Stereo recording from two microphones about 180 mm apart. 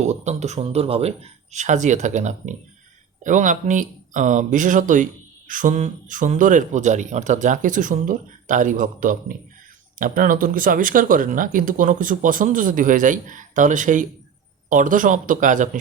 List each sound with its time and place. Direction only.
0.0 s speech: 40° right (ahead or behind)